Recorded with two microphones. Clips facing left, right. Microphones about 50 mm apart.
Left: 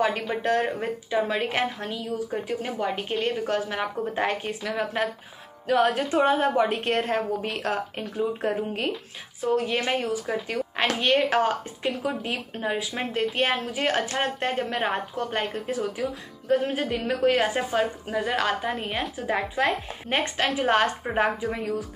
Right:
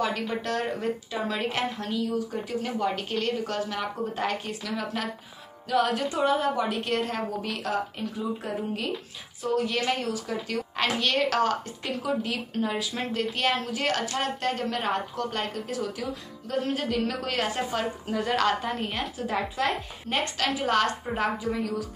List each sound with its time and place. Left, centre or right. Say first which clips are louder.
0.4 s a woman's voice: left 4 dB; left
9.4 s a woman's voice: left 2 dB; left
16.6 s a woman's voice: left 1 dB; centre
18.9 s a woman's voice: left 2 dB; left